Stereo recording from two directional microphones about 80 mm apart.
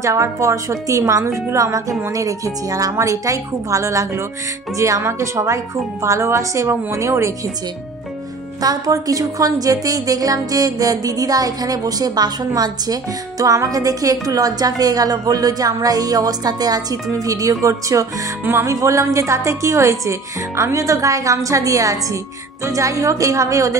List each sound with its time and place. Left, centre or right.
0.0 s a woman's voice: right
8.5 s a woman's voice: right